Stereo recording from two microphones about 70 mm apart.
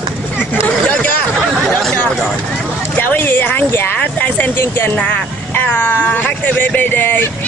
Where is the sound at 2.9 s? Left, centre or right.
Left.